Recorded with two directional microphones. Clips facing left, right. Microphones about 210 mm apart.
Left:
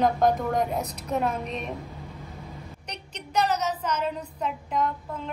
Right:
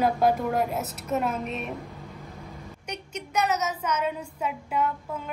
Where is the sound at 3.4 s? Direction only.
10° right (ahead or behind).